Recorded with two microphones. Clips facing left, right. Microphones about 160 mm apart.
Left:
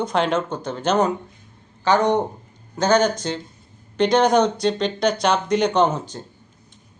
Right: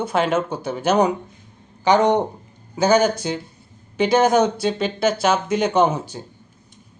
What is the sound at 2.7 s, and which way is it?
Speech, 10° right (ahead or behind).